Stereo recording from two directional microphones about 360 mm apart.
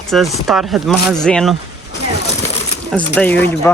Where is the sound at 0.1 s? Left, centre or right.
Centre.